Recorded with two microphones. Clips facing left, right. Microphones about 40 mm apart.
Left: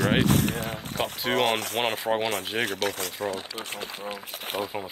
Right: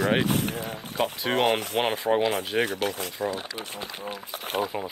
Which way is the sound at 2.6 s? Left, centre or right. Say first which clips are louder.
Even; left.